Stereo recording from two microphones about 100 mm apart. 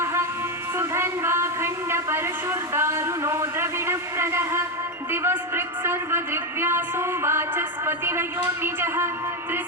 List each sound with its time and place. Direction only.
0.0 s music: 25° right (ahead or behind)
0.8 s speech: 25° right (ahead or behind)